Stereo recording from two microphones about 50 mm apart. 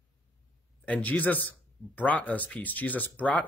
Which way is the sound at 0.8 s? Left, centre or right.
Left.